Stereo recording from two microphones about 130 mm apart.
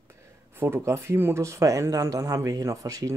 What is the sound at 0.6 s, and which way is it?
Speech, 20° right (ahead or behind).